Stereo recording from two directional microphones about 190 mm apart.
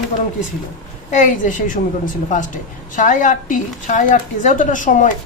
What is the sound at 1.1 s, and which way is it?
Speech, 40° left (ahead or behind).